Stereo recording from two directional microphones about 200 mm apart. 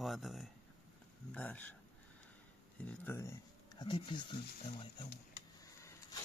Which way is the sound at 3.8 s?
25° left (ahead or behind).